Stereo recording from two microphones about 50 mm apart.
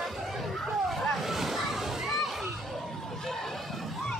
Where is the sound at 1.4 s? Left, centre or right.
Centre.